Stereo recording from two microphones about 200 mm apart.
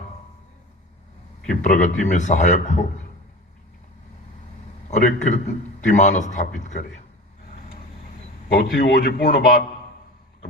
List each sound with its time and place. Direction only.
1.5 s speech: 40° left (ahead or behind)
4.9 s speech: 40° left (ahead or behind)
8.5 s a man's voice: 50° left (ahead or behind)